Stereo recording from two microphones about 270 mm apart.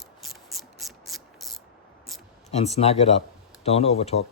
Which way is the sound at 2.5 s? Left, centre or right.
Left.